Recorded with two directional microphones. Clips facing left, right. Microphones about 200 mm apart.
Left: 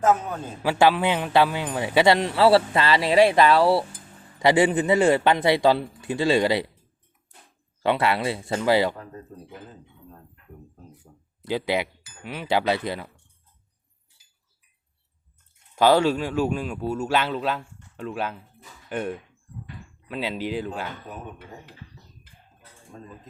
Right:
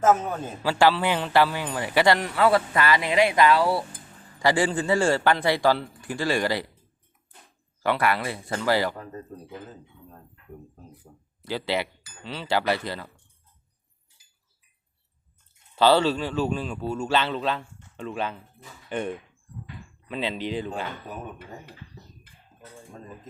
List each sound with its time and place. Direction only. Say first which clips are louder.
0.0 s a man's voice: right 1 dB; 5° right (ahead or behind)
0.6 s a man's voice: left 2 dB; 20° left (ahead or behind)
7.8 s a man's voice: left 2 dB; 25° left (ahead or behind)
11.4 s a man's voice: left 3 dB; 20° left (ahead or behind)
15.7 s a man's voice: left 1 dB; 10° left (ahead or behind)